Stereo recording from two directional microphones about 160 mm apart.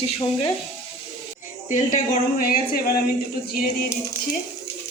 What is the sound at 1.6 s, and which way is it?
Speech, 50° left (ahead or behind).